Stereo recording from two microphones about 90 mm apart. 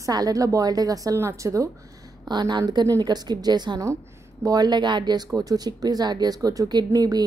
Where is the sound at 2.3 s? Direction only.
50° right (ahead or behind).